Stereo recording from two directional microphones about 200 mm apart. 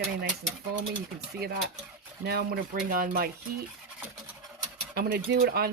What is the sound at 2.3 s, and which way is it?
Speech, 50° right (ahead or behind).